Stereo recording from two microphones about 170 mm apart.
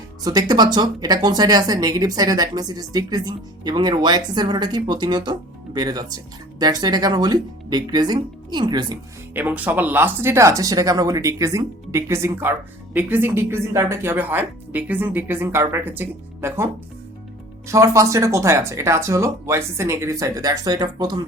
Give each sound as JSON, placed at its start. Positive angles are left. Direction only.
{"t": 0.3, "sound": "speech", "side_deg": -25}
{"t": 9.3, "sound": "speech", "side_deg": -10}
{"t": 17.7, "sound": "speech", "side_deg": -20}